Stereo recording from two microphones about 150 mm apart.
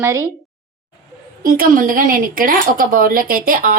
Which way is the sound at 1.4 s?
65° right (ahead or behind).